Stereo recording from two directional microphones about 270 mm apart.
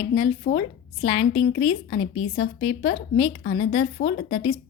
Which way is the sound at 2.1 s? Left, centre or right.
Left.